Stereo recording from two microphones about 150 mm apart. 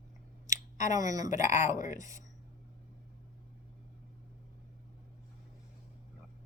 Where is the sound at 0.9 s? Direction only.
25° right (ahead or behind).